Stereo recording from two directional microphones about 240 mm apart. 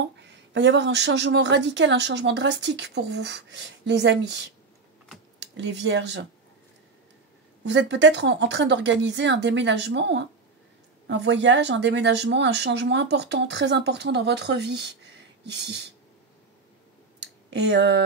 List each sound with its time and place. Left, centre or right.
0.0 s a woman's voice: right
5.4 s speech: right
7.6 s a woman's voice: right
17.2 s a sound: right